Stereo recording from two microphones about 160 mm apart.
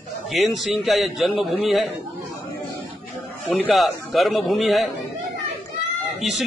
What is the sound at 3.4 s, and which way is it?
Speech, 10° left (ahead or behind).